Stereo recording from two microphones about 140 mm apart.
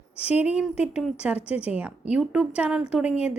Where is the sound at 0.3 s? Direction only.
10° right (ahead or behind).